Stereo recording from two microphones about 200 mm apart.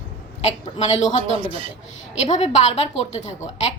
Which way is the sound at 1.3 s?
25° right (ahead or behind).